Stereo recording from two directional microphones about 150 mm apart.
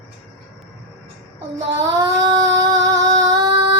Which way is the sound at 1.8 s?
20° right (ahead or behind).